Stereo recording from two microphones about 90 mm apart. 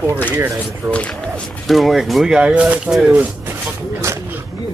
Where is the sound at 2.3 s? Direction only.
15° right (ahead or behind).